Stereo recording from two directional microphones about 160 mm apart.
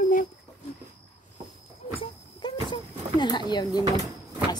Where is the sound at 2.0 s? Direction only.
30° left (ahead or behind).